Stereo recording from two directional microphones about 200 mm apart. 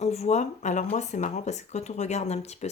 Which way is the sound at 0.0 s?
35° left (ahead or behind).